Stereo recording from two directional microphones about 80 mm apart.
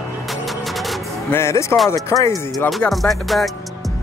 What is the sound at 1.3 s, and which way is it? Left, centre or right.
Speech, left.